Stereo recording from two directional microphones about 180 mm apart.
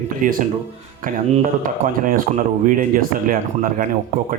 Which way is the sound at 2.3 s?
40° right (ahead or behind).